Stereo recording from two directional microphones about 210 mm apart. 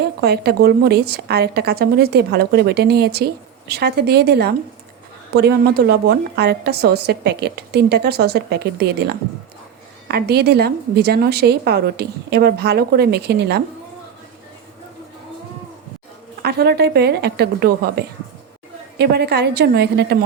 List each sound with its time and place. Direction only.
0.2 s a woman's voice: 50° right (ahead or behind)
16.4 s a woman's voice: 50° right (ahead or behind)